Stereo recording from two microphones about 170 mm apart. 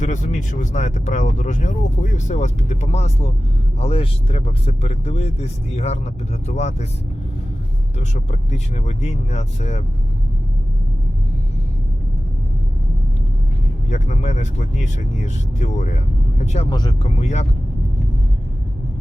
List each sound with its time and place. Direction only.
0.0 s speech: 45° left (ahead or behind)
7.9 s speech: 40° left (ahead or behind)
13.9 s speech: 45° left (ahead or behind)
16.6 s speech: 25° left (ahead or behind)
17.0 s speech: 40° left (ahead or behind)